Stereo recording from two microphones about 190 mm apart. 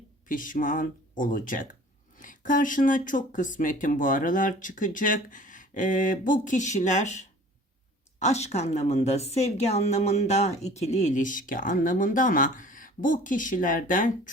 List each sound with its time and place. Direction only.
0.3 s a woman's voice: 45° left (ahead or behind)